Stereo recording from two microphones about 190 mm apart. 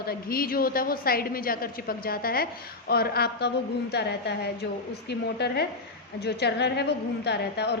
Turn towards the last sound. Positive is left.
turn(degrees=60)  # may be behind; listen again after turning